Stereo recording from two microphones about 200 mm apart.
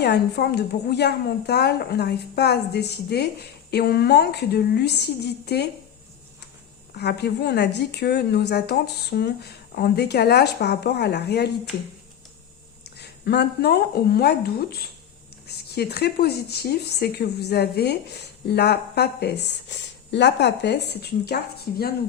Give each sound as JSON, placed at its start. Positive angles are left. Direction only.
{"t": 0.0, "sound": "a woman's voice", "side_deg": 55}
{"t": 6.9, "sound": "a woman's voice", "side_deg": 55}
{"t": 12.8, "sound": "a woman's voice", "side_deg": 55}